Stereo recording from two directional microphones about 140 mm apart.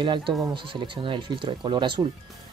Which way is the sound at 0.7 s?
35° right (ahead or behind).